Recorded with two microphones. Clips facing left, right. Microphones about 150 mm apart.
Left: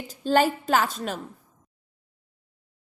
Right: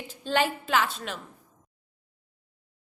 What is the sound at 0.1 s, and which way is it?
A woman's voice, 40° left (ahead or behind).